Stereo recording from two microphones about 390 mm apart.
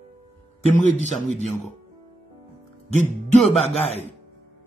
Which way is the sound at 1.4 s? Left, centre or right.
Centre.